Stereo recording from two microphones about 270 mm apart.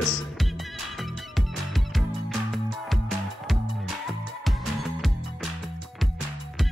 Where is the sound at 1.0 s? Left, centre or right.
Centre.